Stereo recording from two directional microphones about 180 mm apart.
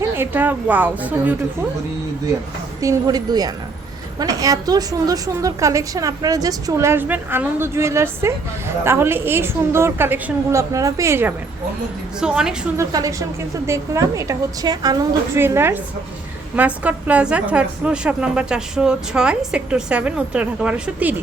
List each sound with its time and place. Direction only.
0.2 s a woman's voice: 10° right (ahead or behind)
2.8 s a woman's voice: 20° right (ahead or behind); by 12.5 s 5° right (ahead or behind)
12.7 s a woman's voice: 15° right (ahead or behind)